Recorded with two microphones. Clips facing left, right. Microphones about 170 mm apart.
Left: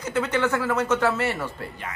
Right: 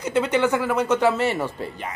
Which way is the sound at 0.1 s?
15° right (ahead or behind).